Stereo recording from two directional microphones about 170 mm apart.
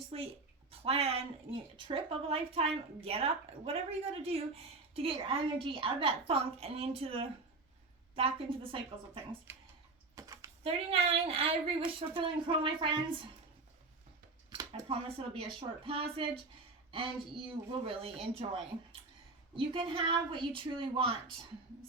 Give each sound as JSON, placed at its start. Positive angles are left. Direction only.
{"t": 0.1, "sound": "a woman's voice", "side_deg": -35}
{"t": 10.2, "sound": "typing", "side_deg": -20}
{"t": 10.6, "sound": "a woman's voice", "side_deg": -35}
{"t": 14.7, "sound": "a woman's voice", "side_deg": -35}
{"t": 17.3, "sound": "a woman's voice", "side_deg": -35}